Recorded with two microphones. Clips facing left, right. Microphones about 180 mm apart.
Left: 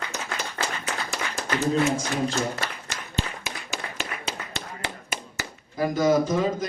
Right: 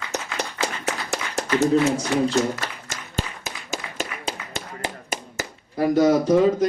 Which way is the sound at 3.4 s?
40° right (ahead or behind).